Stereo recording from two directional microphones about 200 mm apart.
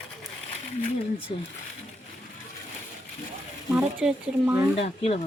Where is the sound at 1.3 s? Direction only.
35° left (ahead or behind).